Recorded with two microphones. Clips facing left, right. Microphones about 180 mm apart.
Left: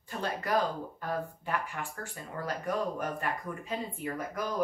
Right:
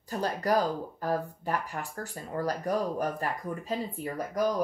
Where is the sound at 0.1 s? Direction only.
40° right (ahead or behind).